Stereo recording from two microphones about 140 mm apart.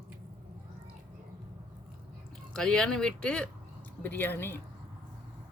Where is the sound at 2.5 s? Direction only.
5° left (ahead or behind).